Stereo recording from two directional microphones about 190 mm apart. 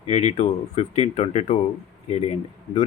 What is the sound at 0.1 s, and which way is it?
Speech, 35° left (ahead or behind).